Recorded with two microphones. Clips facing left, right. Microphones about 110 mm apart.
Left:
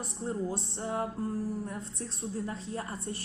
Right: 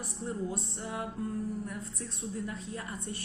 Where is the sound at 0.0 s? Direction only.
30° left (ahead or behind).